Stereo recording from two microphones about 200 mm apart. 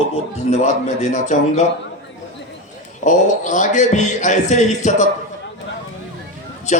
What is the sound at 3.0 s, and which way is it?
A man's voice, 40° left (ahead or behind).